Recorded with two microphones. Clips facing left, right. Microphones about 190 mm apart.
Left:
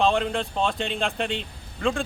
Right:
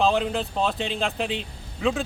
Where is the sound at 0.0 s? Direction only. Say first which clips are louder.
Even; centre (ahead or behind).